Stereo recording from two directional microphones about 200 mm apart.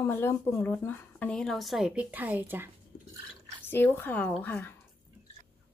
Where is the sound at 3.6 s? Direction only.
10° left (ahead or behind).